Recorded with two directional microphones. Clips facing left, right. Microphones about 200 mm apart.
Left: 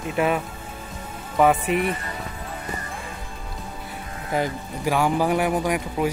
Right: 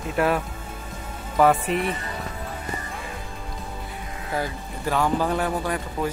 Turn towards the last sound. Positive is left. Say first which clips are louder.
# left 3 dB
turn(degrees=15)  # may be behind; listen again after turning